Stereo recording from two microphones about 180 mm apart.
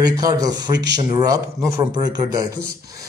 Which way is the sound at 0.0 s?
20° right (ahead or behind).